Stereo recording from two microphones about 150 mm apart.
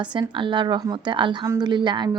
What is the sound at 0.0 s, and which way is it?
Speech, 30° right (ahead or behind).